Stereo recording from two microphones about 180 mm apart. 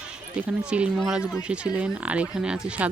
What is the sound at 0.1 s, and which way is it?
Speech, 5° right (ahead or behind).